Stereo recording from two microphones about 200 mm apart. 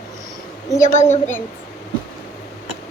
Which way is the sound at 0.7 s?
10° left (ahead or behind).